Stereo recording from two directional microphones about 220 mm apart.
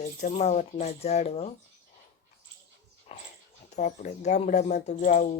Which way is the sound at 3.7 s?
35° left (ahead or behind).